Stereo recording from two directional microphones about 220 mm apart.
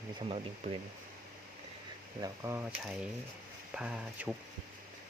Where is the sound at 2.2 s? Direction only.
10° right (ahead or behind).